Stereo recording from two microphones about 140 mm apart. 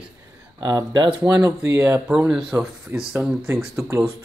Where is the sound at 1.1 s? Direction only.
5° right (ahead or behind).